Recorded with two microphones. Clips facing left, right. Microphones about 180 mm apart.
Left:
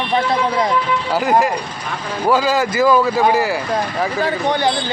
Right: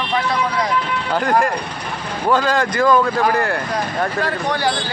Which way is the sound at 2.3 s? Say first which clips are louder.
Left 1 dB; 5° left (ahead or behind).